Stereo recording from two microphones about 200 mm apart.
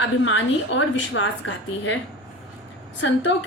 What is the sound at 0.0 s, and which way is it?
A woman's voice, 65° left (ahead or behind).